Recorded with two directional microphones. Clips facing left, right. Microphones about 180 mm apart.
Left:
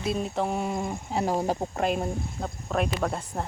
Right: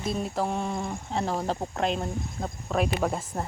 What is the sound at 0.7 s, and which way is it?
Speech, 20° left (ahead or behind).